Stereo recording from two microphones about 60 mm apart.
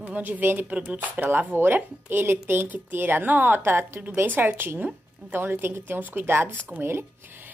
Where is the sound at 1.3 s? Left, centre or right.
Right.